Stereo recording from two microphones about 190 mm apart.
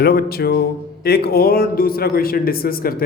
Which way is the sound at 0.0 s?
55° left (ahead or behind).